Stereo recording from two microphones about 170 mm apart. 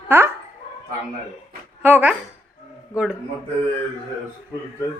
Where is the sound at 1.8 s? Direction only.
10° right (ahead or behind).